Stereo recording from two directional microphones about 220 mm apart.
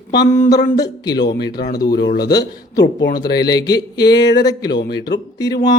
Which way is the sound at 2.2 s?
15° left (ahead or behind).